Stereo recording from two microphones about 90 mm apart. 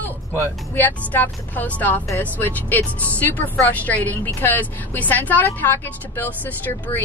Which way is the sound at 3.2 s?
20° left (ahead or behind).